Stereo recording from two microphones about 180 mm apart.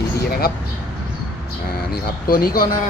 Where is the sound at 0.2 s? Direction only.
55° left (ahead or behind).